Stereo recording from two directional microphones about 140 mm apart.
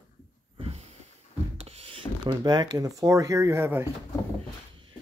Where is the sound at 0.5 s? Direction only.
45° right (ahead or behind).